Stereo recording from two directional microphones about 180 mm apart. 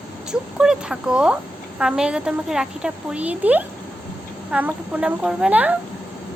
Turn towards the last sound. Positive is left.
turn(degrees=-10)  # may be behind; listen again after turning